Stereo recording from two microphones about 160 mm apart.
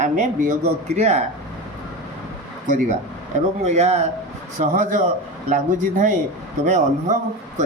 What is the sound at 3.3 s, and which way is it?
Speech, 45° right (ahead or behind).